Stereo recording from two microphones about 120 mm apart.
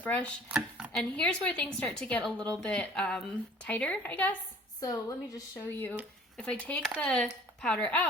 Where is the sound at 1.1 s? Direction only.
10° left (ahead or behind).